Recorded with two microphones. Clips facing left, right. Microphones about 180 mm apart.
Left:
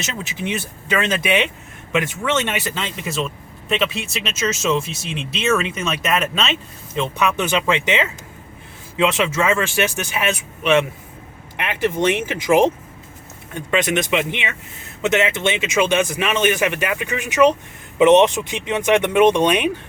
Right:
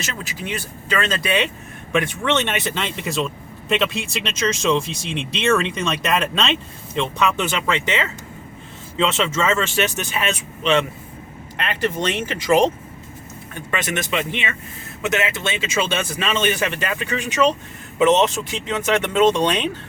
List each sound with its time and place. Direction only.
0.0 s speech: 20° left (ahead or behind)
2.2 s speech: 5° left (ahead or behind)